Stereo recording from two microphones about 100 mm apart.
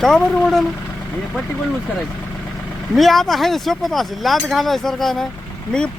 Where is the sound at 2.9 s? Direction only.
Centre (ahead or behind).